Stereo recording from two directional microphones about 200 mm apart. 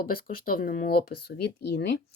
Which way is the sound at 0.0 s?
45° left (ahead or behind).